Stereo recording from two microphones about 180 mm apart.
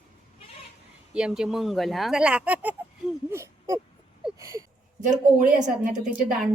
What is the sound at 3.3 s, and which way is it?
Hoot, 15° right (ahead or behind).